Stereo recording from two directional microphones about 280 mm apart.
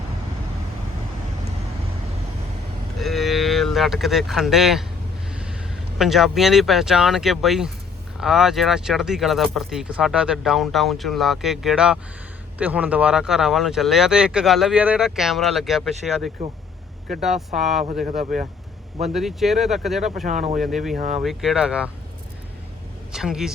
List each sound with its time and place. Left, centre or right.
3.0 s cattle: centre
5.3 s a sound: centre
6.0 s speech: centre
20.2 s speech: right
20.6 s speech: centre
20.9 s speech: right
21.2 s speech: centre
23.1 s speech: centre